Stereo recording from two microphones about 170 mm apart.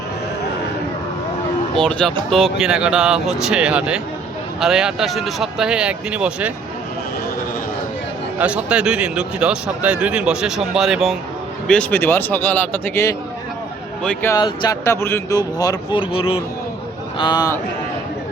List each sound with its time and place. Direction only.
1.8 s speech: 5° left (ahead or behind)
8.4 s speech: 5° right (ahead or behind)
11.7 s speech: 10° left (ahead or behind)
14.3 s speech: 25° left (ahead or behind)